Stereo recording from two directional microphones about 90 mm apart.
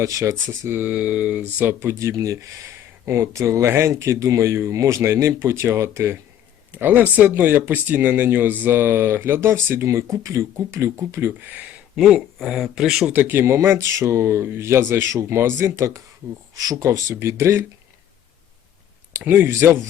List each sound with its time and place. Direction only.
0.0 s speech: 40° right (ahead or behind)
0.8 s speech: 15° right (ahead or behind)
1.8 s speech: 30° right (ahead or behind)
6.7 s speech: 20° right (ahead or behind)
11.9 s speech: centre (ahead or behind)
13.1 s speech: 25° right (ahead or behind)
19.1 s speech: 20° right (ahead or behind)